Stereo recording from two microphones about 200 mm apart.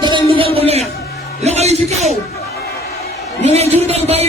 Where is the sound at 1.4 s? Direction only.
30° right (ahead or behind).